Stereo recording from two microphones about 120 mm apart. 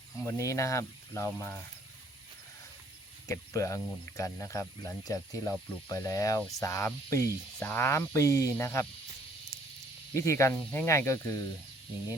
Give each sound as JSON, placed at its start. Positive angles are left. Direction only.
{"t": 0.2, "sound": "speech", "side_deg": 25}
{"t": 3.2, "sound": "speech", "side_deg": 25}
{"t": 10.2, "sound": "speech", "side_deg": 25}